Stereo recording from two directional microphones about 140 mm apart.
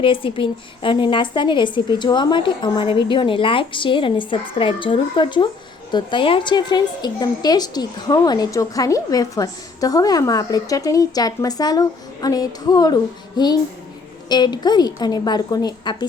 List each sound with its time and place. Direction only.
0.0 s a woman's voice: 40° left (ahead or behind)